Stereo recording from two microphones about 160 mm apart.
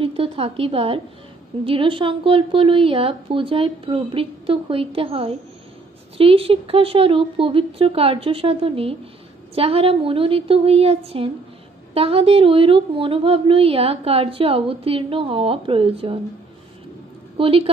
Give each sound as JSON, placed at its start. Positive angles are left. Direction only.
{"t": 0.0, "sound": "a woman's voice", "side_deg": -35}
{"t": 17.4, "sound": "a woman's voice", "side_deg": -35}